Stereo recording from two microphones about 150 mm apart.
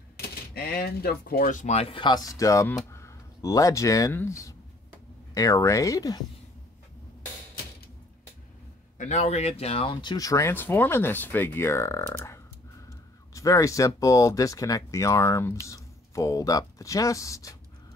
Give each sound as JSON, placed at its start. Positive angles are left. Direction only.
{"t": 0.6, "sound": "speech", "side_deg": 90}
{"t": 8.9, "sound": "speech", "side_deg": 50}
{"t": 10.0, "sound": "speech", "side_deg": 25}